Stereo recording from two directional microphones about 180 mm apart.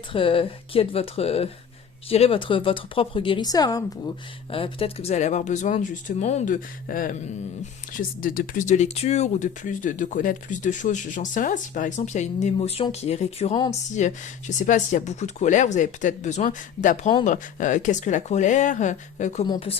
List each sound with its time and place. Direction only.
0.1 s a woman's voice: 30° left (ahead or behind)
4.5 s speech: 30° left (ahead or behind)
19.5 s speech: 30° left (ahead or behind)